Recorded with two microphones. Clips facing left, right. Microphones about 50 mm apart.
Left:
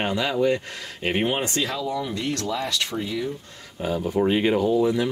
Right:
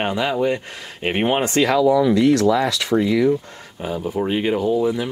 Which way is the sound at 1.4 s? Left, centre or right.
Right.